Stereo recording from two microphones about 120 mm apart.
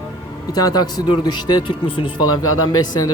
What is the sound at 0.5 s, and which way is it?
A man's voice, 35° left (ahead or behind).